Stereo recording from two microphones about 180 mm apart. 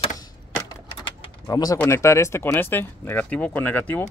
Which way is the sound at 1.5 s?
20° left (ahead or behind).